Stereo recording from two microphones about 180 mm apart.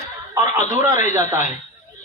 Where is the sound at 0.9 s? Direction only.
40° left (ahead or behind).